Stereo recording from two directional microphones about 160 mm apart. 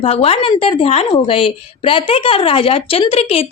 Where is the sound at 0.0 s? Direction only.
35° left (ahead or behind).